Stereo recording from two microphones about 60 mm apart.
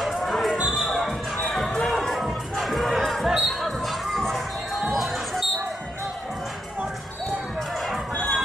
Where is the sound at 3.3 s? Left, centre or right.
Centre.